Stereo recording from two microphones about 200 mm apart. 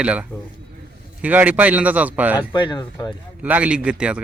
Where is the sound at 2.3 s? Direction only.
20° left (ahead or behind).